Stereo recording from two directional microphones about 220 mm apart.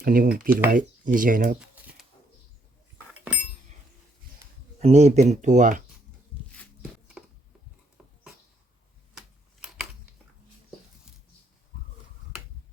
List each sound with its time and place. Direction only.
0.0 s speech: 40° right (ahead or behind)
4.8 s speech: 30° right (ahead or behind)
7.2 s a sound: 5° right (ahead or behind)